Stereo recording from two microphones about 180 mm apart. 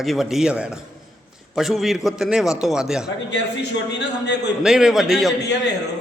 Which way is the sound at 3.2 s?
70° left (ahead or behind).